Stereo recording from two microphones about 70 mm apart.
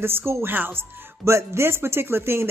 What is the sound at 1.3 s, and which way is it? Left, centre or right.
Speech, right.